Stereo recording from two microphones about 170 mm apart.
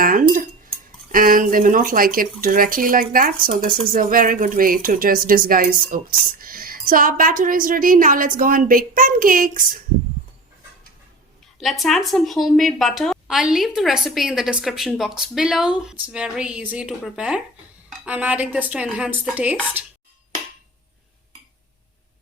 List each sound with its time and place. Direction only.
0.0 s dishes: 55° right (ahead or behind)
1.1 s speech: 55° right (ahead or behind)
11.6 s a woman's voice: centre (ahead or behind)